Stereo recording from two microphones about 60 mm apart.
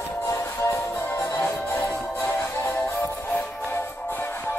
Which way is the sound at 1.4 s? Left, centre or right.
Left.